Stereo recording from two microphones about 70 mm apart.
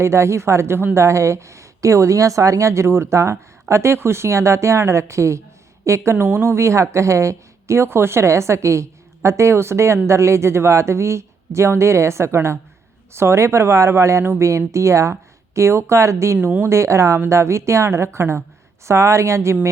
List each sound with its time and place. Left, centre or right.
0.0 s a woman's voice: right
16.4 s speech: right
16.6 s a woman's voice: right